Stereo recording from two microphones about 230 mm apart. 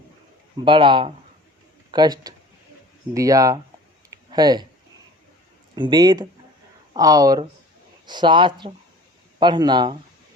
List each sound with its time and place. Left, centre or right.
0.6 s speech: right
4.1 s a sound: centre
5.7 s speech: centre